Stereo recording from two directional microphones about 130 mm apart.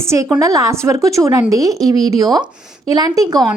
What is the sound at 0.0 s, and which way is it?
A woman's voice, 25° right (ahead or behind).